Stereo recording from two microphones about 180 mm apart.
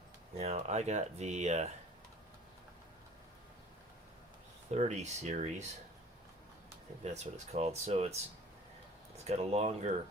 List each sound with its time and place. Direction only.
0.3 s speech: 40° right (ahead or behind)
4.7 s speech: 40° right (ahead or behind)
7.0 s speech: 35° right (ahead or behind)
9.2 s speech: 35° right (ahead or behind)